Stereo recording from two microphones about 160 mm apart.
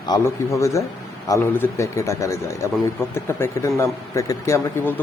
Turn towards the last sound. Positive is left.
turn(degrees=15)  # may be behind; listen again after turning